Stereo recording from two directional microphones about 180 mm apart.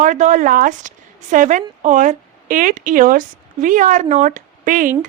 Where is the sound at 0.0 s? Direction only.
45° right (ahead or behind).